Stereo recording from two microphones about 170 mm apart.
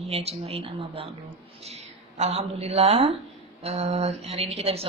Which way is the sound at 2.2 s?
40° right (ahead or behind).